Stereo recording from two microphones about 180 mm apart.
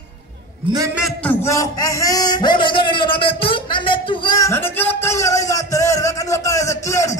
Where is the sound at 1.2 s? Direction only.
10° left (ahead or behind).